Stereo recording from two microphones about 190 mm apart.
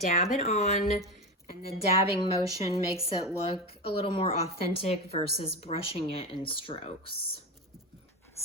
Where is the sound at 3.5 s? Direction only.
30° left (ahead or behind).